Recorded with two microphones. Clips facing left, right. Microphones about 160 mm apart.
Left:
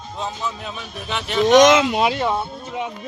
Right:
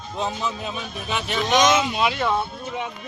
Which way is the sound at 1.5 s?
85° left.